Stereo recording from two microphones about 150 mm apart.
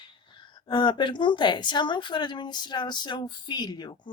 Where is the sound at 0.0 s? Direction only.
30° left (ahead or behind).